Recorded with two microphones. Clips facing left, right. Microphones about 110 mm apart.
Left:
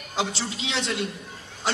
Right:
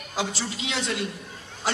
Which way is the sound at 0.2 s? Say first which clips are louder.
Left 1 dB; 25° left (ahead or behind).